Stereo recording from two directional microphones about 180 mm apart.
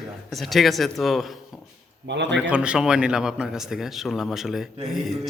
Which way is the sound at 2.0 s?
75° right (ahead or behind).